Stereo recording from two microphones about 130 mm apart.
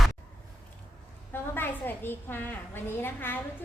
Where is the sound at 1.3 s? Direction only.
15° left (ahead or behind).